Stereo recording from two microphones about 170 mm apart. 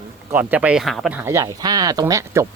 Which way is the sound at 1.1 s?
15° right (ahead or behind).